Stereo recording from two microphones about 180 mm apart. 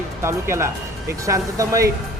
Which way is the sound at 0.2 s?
15° right (ahead or behind).